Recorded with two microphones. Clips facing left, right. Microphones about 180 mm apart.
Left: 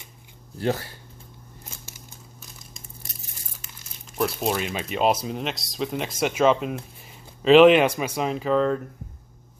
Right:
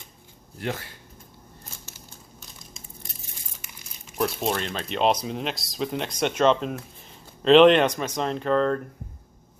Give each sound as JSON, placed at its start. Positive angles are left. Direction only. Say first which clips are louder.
{"t": 0.6, "sound": "speech", "louder": "left 6 dB", "side_deg": 35}
{"t": 4.2, "sound": "speech", "louder": "left 1 dB", "side_deg": 0}